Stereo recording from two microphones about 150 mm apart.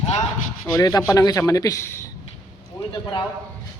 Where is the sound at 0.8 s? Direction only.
25° left (ahead or behind).